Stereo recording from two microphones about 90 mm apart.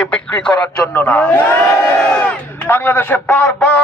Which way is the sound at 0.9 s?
20° left (ahead or behind).